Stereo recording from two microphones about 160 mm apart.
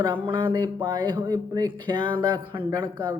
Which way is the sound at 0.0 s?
30° right (ahead or behind).